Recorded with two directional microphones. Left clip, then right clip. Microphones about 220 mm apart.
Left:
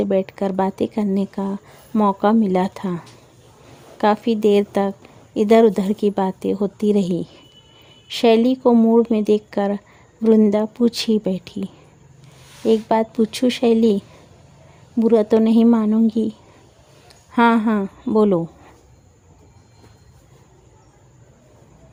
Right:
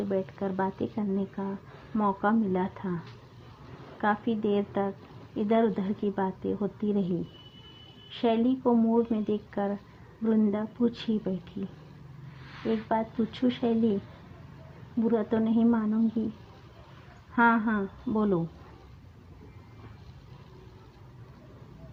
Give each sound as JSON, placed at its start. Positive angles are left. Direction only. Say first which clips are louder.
{"t": 0.0, "sound": "a woman's voice", "louder": "left 11 dB", "side_deg": 60}
{"t": 4.0, "sound": "a woman's voice", "louder": "left 11 dB", "side_deg": 55}
{"t": 15.0, "sound": "a woman's voice", "louder": "left 13 dB", "side_deg": 55}
{"t": 17.3, "sound": "a woman's voice", "louder": "left 8 dB", "side_deg": 55}